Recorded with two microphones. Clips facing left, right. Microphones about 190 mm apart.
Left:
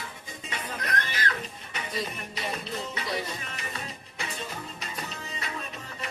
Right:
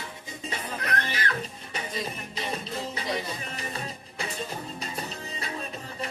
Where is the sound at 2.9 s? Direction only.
35° right (ahead or behind).